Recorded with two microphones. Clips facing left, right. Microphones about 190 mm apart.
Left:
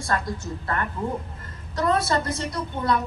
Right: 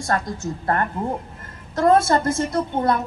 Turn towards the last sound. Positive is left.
turn(degrees=-50)  # may be behind; listen again after turning